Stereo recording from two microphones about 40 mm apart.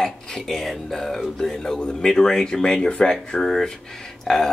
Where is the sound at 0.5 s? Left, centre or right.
Centre.